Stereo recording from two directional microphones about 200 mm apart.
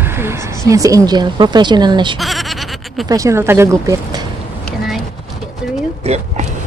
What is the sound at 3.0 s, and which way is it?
Speech, 15° right (ahead or behind).